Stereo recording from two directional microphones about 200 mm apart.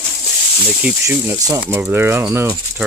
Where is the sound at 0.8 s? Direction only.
10° right (ahead or behind).